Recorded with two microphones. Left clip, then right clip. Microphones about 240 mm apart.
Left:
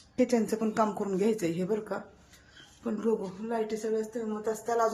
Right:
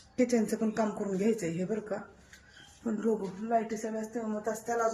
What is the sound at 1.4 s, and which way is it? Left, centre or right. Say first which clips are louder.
Speech: left 3 dB; centre.